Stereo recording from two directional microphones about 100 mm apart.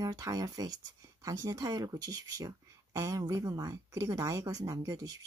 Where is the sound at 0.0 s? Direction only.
35° right (ahead or behind).